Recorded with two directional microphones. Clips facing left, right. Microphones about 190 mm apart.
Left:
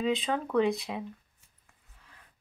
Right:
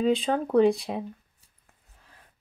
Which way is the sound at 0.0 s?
35° right (ahead or behind).